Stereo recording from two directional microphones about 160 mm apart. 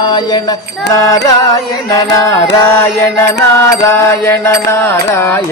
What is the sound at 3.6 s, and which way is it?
Mantra, 15° left (ahead or behind).